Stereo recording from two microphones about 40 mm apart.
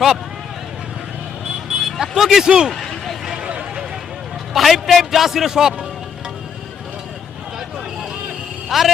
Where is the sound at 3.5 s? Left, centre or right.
Right.